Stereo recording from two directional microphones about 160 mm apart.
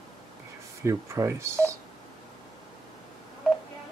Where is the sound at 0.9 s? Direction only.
20° right (ahead or behind).